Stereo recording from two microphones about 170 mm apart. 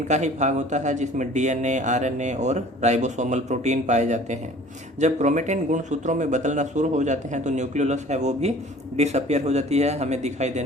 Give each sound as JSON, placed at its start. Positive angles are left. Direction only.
{"t": 0.1, "sound": "speech", "side_deg": -45}